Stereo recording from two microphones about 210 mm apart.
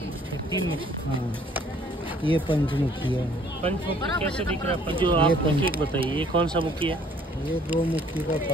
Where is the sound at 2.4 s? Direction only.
25° left (ahead or behind).